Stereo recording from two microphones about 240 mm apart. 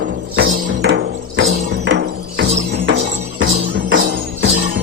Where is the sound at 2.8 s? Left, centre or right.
Right.